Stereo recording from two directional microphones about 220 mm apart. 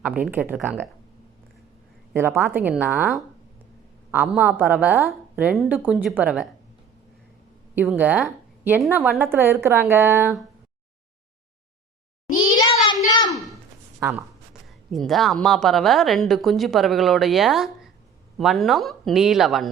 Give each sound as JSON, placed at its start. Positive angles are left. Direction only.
{"t": 0.2, "sound": "a woman's voice", "side_deg": -10}
{"t": 2.1, "sound": "a woman's voice", "side_deg": -10}
{"t": 7.8, "sound": "a woman's voice", "side_deg": -5}
{"t": 12.4, "sound": "a sound", "side_deg": 20}
{"t": 14.0, "sound": "speech", "side_deg": -5}